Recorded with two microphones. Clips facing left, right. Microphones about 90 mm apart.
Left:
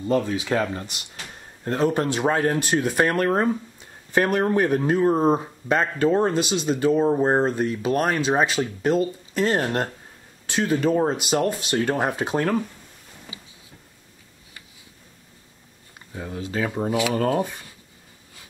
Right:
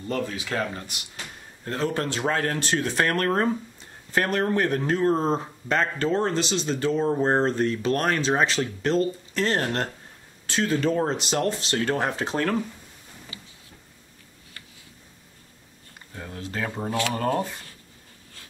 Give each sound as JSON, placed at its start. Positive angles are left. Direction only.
{"t": 0.0, "sound": "speech", "side_deg": 20}
{"t": 16.1, "sound": "speech", "side_deg": 15}